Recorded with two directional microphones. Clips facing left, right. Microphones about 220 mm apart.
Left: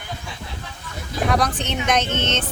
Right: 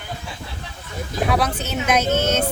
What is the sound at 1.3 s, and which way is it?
Speech, 5° right (ahead or behind).